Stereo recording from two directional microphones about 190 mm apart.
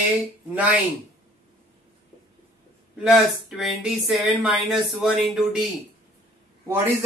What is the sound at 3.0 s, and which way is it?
Speech, centre (ahead or behind).